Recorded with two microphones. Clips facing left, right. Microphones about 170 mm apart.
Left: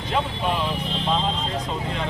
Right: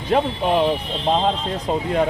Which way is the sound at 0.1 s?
50° right (ahead or behind).